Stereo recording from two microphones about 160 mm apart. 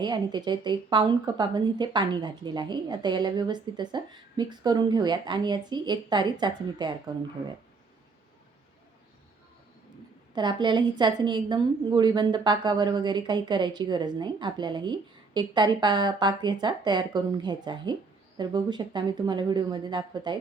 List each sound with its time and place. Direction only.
0.0 s a woman's voice: 30° right (ahead or behind)
10.3 s a woman's voice: 25° right (ahead or behind)